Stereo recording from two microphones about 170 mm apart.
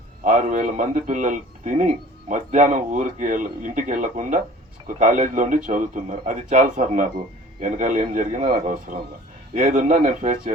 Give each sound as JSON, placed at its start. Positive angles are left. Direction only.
{"t": 0.3, "sound": "a man's voice", "side_deg": -50}